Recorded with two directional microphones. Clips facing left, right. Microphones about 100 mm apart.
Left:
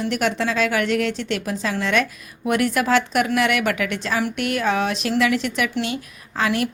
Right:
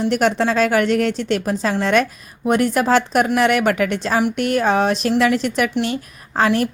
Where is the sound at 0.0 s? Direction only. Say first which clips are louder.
Right 5 dB; 35° right (ahead or behind).